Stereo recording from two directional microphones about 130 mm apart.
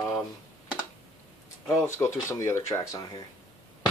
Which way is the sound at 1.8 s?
20° left (ahead or behind).